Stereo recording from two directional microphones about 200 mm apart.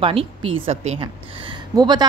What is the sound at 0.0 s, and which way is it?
A woman's voice, 25° right (ahead or behind).